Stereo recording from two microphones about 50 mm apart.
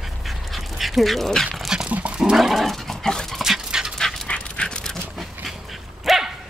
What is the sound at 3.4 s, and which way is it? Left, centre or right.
Dog, centre.